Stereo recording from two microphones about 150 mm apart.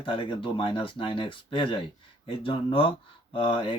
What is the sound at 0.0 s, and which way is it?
Speech, 35° left (ahead or behind).